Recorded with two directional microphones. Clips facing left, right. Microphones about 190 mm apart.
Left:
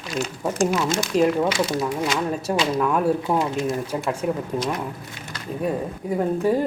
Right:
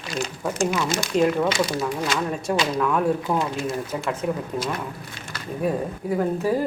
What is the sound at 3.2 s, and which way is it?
Speech, 25° left (ahead or behind).